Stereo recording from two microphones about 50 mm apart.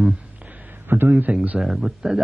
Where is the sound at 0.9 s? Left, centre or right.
Right.